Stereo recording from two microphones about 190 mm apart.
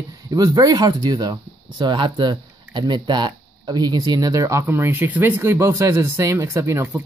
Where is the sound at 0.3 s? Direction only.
20° right (ahead or behind).